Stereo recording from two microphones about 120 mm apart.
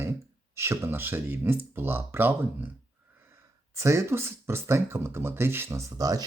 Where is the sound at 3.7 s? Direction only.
25° right (ahead or behind).